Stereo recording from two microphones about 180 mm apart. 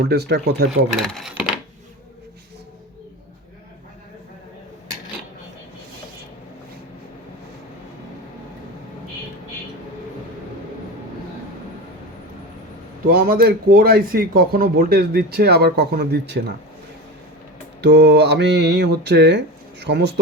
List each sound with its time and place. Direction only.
0.0 s a man's voice: 65° right (ahead or behind)
1.0 s speech: centre (ahead or behind)
13.1 s a man's voice: 55° right (ahead or behind)
17.7 s speech: 70° right (ahead or behind)